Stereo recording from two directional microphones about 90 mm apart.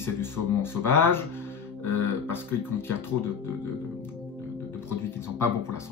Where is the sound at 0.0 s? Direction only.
25° left (ahead or behind).